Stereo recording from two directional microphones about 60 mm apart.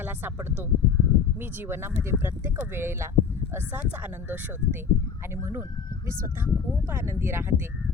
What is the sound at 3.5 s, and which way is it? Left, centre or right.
Speech, right.